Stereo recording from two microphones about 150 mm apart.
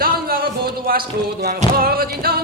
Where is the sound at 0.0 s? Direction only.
85° right.